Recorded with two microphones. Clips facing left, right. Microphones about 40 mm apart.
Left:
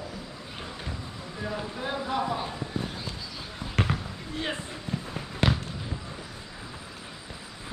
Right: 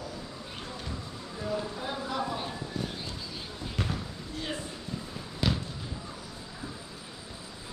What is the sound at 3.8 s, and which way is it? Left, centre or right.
Basketball bounce, left.